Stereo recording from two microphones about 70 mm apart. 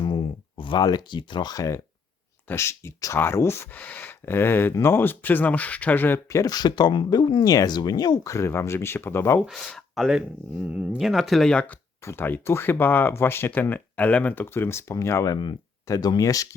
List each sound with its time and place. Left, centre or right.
0.0 s a sound: left
0.8 s speech: left
2.6 s speech: left
3.7 s speech: left
6.2 s speech: left
6.5 s speech: left
8.2 s speech: left
9.5 s speech: centre
10.2 s speech: centre
11.0 s speech: centre
11.5 s speech: left
15.2 s speech: left